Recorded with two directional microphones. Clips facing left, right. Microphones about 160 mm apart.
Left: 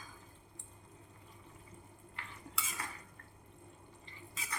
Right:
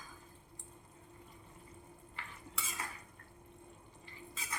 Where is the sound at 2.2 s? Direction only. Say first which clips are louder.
Even; centre (ahead or behind).